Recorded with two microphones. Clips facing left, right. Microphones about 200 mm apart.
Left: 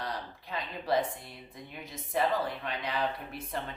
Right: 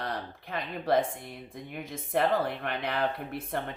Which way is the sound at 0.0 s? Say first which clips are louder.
Right 3 dB; 55° right (ahead or behind).